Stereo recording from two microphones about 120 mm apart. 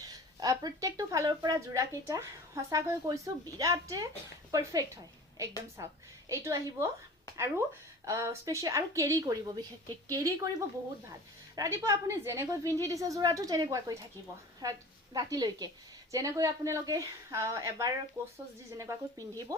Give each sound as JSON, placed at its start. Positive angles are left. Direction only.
{"t": 0.0, "sound": "a woman's voice", "side_deg": -30}
{"t": 8.0, "sound": "speech", "side_deg": -25}
{"t": 11.5, "sound": "a woman's voice", "side_deg": -25}